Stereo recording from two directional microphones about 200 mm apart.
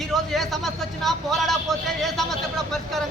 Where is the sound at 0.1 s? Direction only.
Centre (ahead or behind).